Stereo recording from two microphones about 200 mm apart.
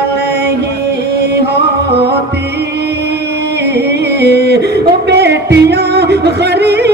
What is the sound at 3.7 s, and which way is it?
Music, 55° right (ahead or behind).